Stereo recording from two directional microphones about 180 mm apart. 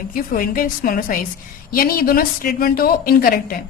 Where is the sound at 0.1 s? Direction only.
50° left (ahead or behind).